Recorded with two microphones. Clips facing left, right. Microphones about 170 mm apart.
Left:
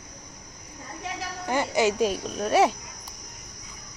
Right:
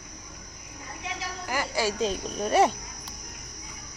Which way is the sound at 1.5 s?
25° left (ahead or behind).